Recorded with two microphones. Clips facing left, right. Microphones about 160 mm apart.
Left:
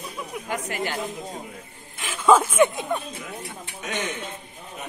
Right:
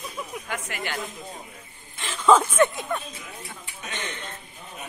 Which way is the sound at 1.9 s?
10° left (ahead or behind).